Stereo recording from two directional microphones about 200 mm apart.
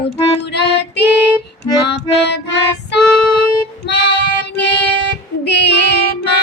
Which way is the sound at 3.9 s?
55° left (ahead or behind).